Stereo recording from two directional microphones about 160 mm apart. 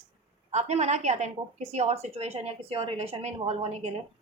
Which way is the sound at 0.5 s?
45° right (ahead or behind).